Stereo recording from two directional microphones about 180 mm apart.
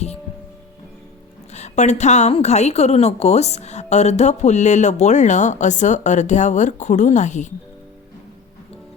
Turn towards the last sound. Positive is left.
turn(degrees=40)  # may be behind; listen again after turning